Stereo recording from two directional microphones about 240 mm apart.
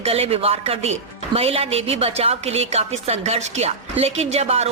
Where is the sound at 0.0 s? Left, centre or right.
Right.